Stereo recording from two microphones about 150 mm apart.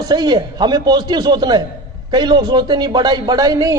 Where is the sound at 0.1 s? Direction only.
25° right (ahead or behind).